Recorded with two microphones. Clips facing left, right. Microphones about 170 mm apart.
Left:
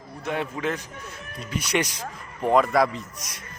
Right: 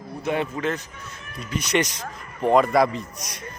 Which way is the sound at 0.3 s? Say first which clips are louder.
Right 3 dB; centre (ahead or behind).